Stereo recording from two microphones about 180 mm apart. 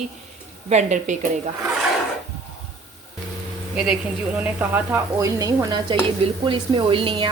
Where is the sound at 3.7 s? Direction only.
5° right (ahead or behind).